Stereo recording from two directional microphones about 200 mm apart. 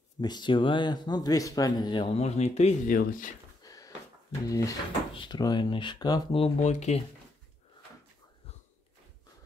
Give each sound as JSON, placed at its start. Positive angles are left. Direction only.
{"t": 0.2, "sound": "speech", "side_deg": 20}
{"t": 3.0, "sound": "speech", "side_deg": 45}
{"t": 3.6, "sound": "a sound", "side_deg": 15}
{"t": 4.5, "sound": "speech", "side_deg": 15}